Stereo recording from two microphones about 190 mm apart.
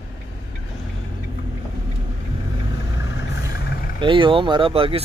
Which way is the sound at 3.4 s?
60° left (ahead or behind).